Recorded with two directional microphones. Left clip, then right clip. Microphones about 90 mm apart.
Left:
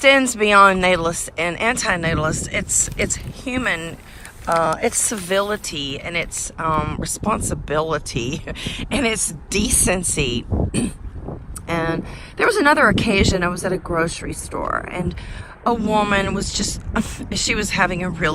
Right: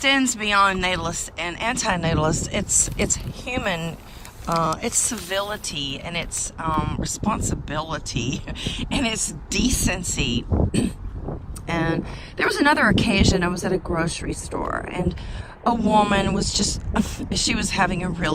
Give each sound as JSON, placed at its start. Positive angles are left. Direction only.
{"t": 0.0, "sound": "speech", "side_deg": -15}
{"t": 5.0, "sound": "speech", "side_deg": -20}
{"t": 10.7, "sound": "a sound", "side_deg": 0}
{"t": 11.7, "sound": "speech", "side_deg": -30}